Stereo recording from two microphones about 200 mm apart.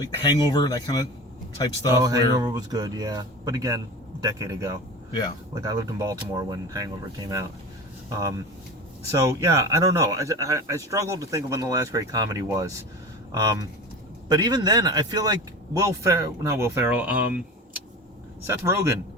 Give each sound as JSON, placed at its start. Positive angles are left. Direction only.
{"t": 0.0, "sound": "speech", "side_deg": 20}
{"t": 2.0, "sound": "speech", "side_deg": -15}
{"t": 9.1, "sound": "speech", "side_deg": -15}